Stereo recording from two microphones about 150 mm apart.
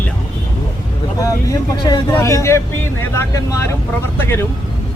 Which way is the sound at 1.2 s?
20° left (ahead or behind).